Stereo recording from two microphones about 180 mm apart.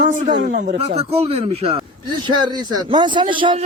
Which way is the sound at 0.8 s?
35° right (ahead or behind).